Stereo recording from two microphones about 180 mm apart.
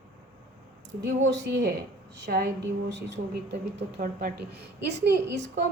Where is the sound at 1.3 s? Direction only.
75° right (ahead or behind).